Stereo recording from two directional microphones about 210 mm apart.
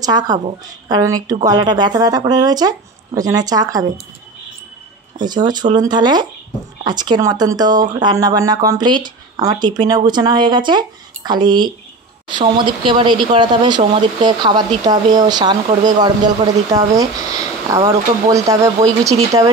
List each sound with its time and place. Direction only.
0.0 s speech: 20° right (ahead or behind)
5.2 s speech: 20° right (ahead or behind)